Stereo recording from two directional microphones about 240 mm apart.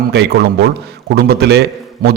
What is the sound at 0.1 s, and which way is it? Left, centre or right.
A man's voice, right.